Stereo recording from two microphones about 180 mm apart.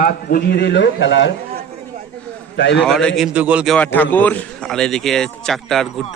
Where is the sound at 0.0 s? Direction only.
55° left (ahead or behind); by 1.3 s 90° left.